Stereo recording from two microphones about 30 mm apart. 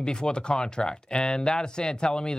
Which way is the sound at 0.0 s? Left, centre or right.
Left.